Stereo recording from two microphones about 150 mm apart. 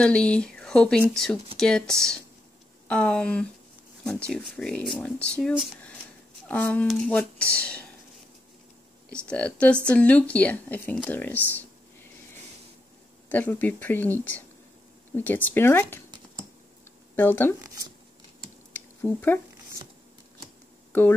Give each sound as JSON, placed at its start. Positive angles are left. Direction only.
{"t": 0.0, "sound": "speech", "side_deg": 5}
{"t": 9.1, "sound": "speech", "side_deg": 5}
{"t": 13.3, "sound": "speech", "side_deg": 10}
{"t": 17.1, "sound": "speech", "side_deg": 15}
{"t": 17.6, "sound": "shuffling cards", "side_deg": -20}
{"t": 18.7, "sound": "a sound", "side_deg": 15}